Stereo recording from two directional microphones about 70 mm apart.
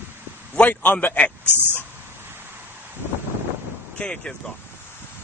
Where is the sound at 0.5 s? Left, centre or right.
Left.